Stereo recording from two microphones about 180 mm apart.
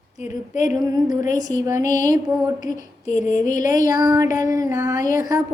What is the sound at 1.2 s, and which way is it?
Speech, 45° left (ahead or behind).